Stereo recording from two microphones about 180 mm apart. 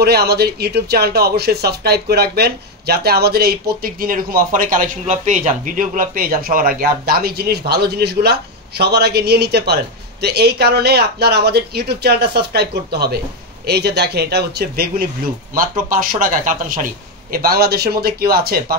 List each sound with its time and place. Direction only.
0.0 s speech: 60° right (ahead or behind)
15.9 s speech: 50° right (ahead or behind)
17.3 s speech: 60° right (ahead or behind)